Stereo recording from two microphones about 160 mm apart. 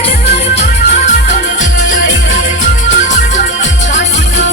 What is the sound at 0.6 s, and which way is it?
Music, 50° left (ahead or behind).